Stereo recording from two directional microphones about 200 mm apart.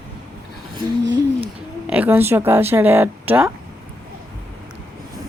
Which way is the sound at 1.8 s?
5° right (ahead or behind).